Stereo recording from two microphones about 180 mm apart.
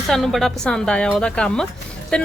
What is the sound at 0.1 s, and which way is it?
Speech, centre (ahead or behind).